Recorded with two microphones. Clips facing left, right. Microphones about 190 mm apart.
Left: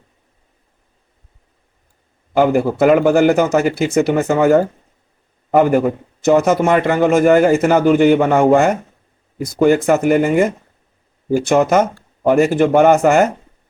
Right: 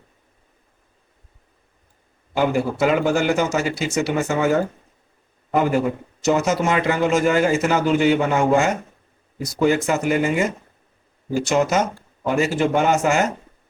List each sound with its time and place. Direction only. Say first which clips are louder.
2.4 s a man's voice: left 6 dB; 55° left (ahead or behind)